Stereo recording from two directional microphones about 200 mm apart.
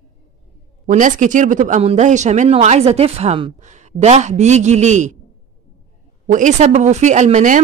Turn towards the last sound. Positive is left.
turn(degrees=-40)  # may be behind; listen again after turning